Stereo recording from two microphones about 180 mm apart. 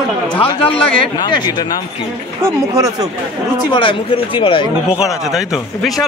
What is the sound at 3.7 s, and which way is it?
Speech, 30° left (ahead or behind).